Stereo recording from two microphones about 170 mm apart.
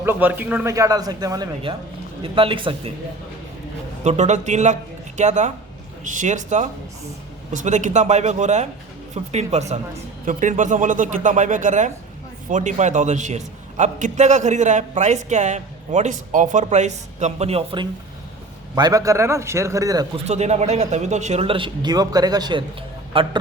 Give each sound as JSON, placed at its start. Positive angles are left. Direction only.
{"t": 0.0, "sound": "a man's voice", "side_deg": -10}
{"t": 4.0, "sound": "a man's voice", "side_deg": -45}
{"t": 18.7, "sound": "a man's voice", "side_deg": -20}
{"t": 20.2, "sound": "speech", "side_deg": -40}